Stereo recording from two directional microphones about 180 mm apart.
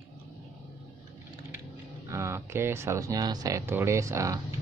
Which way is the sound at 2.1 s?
15° right (ahead or behind).